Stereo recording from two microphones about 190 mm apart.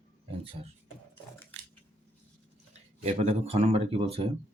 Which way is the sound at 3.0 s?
35° right (ahead or behind).